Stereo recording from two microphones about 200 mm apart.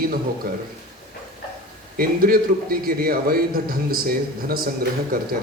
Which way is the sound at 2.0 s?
45° right (ahead or behind).